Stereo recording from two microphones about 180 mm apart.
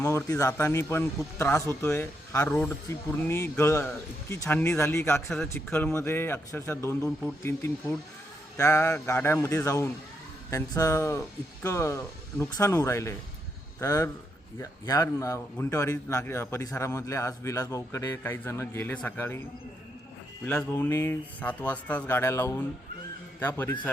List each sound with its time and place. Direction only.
0.0 s speech: 15° left (ahead or behind)
20.5 s speech: 10° left (ahead or behind)